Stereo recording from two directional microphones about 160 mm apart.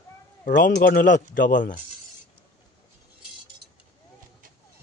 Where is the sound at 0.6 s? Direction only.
90° left; by 1.8 s 55° left (ahead or behind).